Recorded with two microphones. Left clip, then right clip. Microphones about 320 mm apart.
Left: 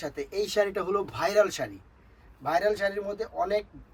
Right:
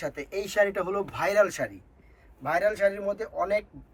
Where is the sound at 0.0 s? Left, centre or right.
Centre.